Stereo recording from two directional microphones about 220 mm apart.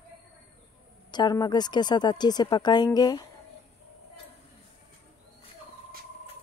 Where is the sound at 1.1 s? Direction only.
20° left (ahead or behind).